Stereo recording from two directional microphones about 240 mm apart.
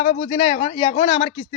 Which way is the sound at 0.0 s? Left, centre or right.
Left.